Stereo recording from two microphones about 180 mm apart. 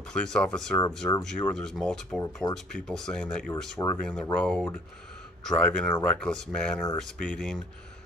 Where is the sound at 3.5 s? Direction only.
15° left (ahead or behind).